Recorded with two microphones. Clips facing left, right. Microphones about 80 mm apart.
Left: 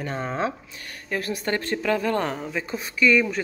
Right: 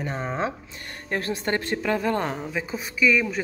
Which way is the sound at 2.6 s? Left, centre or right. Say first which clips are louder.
Left 2 dB; centre.